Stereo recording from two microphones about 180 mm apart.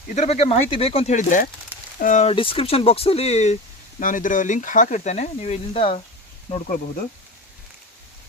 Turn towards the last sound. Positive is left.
turn(degrees=40)  # may be behind; listen again after turning